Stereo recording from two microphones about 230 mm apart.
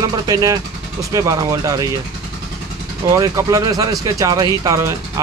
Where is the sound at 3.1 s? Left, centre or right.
Centre.